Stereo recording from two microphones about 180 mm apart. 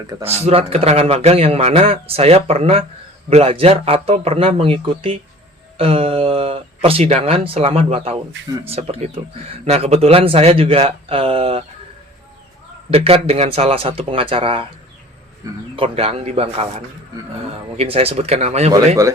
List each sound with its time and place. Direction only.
0.2 s a man's voice: 35° right (ahead or behind)
12.9 s a man's voice: 35° right (ahead or behind)
15.7 s a man's voice: 30° right (ahead or behind)